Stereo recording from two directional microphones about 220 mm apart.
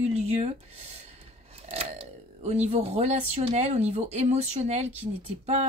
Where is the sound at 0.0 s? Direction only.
30° right (ahead or behind).